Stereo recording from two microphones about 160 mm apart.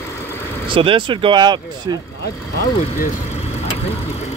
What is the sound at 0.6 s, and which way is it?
Speech, 30° right (ahead or behind).